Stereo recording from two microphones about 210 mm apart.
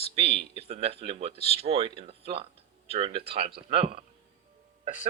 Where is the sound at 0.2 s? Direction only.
25° right (ahead or behind).